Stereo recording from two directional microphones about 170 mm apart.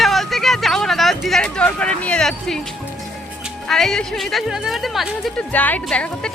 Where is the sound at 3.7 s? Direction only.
5° left (ahead or behind).